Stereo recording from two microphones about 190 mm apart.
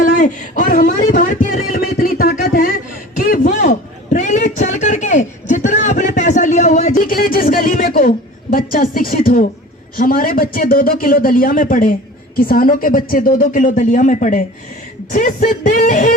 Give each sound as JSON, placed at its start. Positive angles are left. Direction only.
{"t": 0.0, "sound": "speech", "side_deg": 45}
{"t": 3.2, "sound": "a sound", "side_deg": 50}
{"t": 10.0, "sound": "speech", "side_deg": 50}